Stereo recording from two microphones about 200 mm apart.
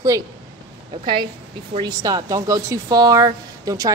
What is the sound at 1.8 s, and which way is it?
Speech, 20° right (ahead or behind).